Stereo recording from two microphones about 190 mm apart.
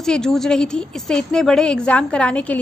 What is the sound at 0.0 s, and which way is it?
A woman's voice, 5° left (ahead or behind).